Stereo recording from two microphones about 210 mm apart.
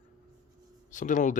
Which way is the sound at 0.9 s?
35° left (ahead or behind).